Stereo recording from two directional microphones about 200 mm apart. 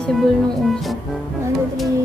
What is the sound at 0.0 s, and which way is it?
Music, centre (ahead or behind).